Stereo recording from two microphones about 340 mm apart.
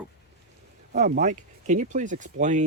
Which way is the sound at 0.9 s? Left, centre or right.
Right.